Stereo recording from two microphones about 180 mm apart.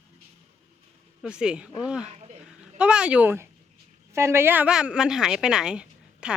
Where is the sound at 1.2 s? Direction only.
5° right (ahead or behind).